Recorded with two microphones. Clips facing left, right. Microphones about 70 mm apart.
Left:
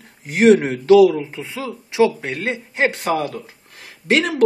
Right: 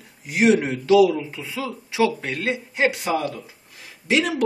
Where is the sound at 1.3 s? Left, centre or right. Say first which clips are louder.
Left 1 dB; left.